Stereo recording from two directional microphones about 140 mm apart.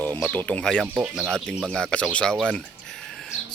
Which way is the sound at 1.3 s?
5° left (ahead or behind).